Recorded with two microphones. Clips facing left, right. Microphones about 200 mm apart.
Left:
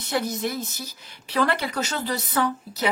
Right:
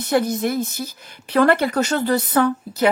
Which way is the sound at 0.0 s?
55° right (ahead or behind).